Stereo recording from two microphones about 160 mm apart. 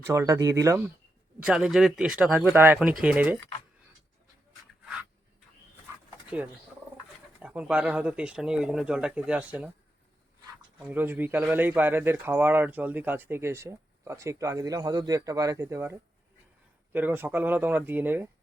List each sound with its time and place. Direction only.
0.1 s speech: 20° right (ahead or behind)
1.4 s speech: 5° right (ahead or behind)
7.3 s speech: 10° right (ahead or behind)
10.8 s speech: 10° right (ahead or behind)